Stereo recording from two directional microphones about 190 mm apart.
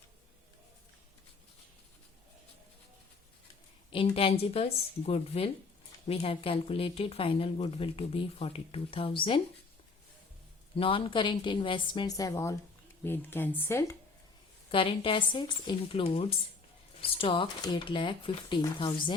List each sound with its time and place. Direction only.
3.9 s a woman's voice: 30° left (ahead or behind)
10.8 s a woman's voice: 30° left (ahead or behind)
14.7 s speech: 25° left (ahead or behind)